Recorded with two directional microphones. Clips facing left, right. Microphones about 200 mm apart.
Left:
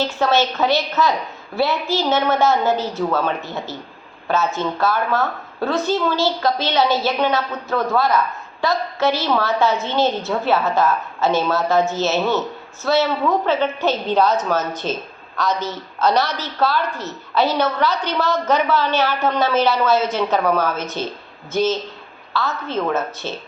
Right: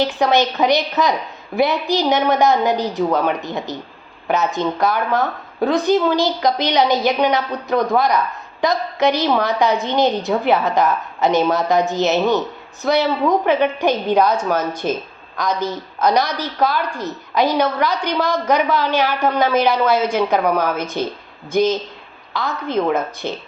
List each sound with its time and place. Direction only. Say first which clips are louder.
0.0 s a woman's voice: right 2 dB; 15° right (ahead or behind)